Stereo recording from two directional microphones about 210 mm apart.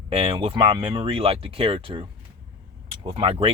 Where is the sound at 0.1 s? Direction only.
25° right (ahead or behind).